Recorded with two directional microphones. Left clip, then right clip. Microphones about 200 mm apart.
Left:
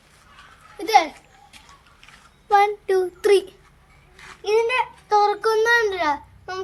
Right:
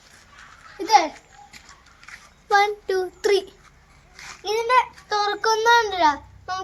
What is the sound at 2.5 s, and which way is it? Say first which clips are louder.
Child singing: left 2 dB; 10° left (ahead or behind).